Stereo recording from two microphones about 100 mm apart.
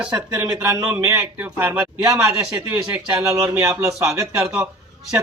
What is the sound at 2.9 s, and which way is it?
Speech, 15° right (ahead or behind).